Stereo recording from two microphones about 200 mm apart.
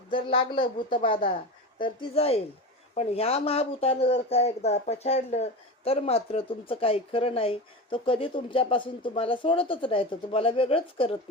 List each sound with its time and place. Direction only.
0.1 s speech: 25° left (ahead or behind)